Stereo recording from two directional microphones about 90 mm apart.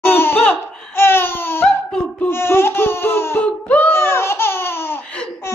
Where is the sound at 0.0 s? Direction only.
25° left (ahead or behind).